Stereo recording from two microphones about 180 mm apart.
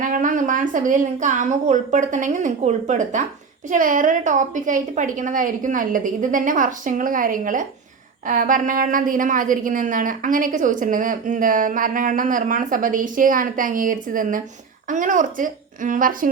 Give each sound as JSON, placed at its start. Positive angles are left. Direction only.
{"t": 0.0, "sound": "a woman's voice", "side_deg": -50}